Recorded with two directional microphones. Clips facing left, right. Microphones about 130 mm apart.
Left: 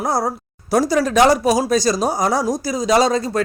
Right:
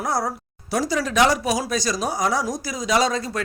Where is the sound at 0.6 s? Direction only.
45° left (ahead or behind).